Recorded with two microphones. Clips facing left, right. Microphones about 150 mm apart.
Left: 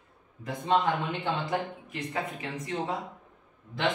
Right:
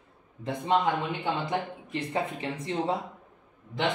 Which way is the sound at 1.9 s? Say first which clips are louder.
Right 6 dB; 30° right (ahead or behind).